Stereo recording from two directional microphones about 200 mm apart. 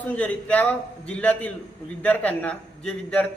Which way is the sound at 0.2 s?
5° left (ahead or behind).